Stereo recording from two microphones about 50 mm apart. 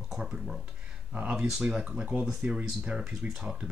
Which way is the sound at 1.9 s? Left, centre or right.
Right.